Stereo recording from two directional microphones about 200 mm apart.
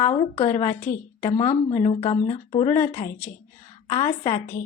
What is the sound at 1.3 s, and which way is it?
A woman's voice, 25° left (ahead or behind).